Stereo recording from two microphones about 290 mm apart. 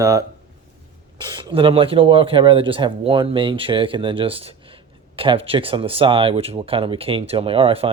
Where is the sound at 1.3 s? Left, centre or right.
Centre.